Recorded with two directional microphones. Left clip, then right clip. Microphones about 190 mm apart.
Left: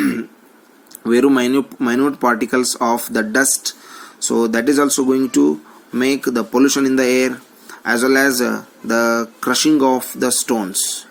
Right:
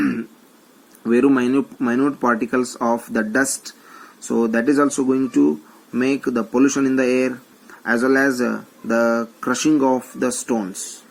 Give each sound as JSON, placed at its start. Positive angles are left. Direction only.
{"t": 0.0, "sound": "a sound", "side_deg": 50}
{"t": 1.0, "sound": "speech", "side_deg": 50}
{"t": 4.5, "sound": "speech", "side_deg": 50}